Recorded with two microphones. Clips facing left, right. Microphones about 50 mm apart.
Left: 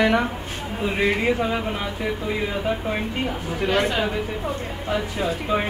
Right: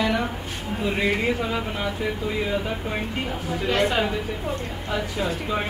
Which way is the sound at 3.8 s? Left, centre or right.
Centre.